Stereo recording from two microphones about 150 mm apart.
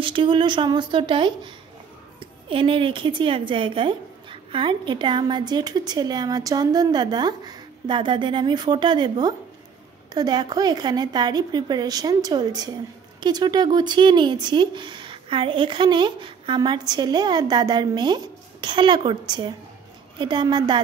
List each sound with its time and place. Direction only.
0.0 s a woman's voice: 35° right (ahead or behind)
2.5 s a woman's voice: 35° right (ahead or behind)